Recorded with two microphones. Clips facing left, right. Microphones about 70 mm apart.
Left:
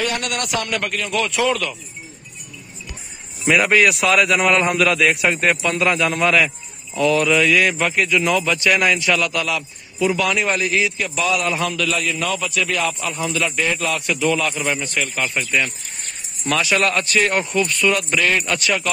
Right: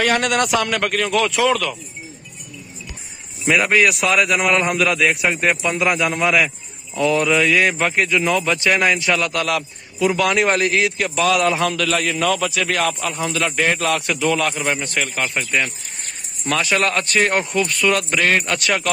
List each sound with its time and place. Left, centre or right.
0.7 s speech: right
3.4 s a man's voice: centre
5.6 s speech: centre
7.0 s speech: right
9.3 s a man's voice: right
11.3 s a man's voice: right
13.6 s a man's voice: right
13.8 s speech: right
14.3 s a man's voice: right
17.6 s a man's voice: right